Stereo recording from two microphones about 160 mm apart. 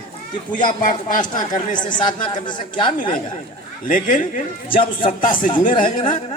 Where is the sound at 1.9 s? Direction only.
30° left (ahead or behind).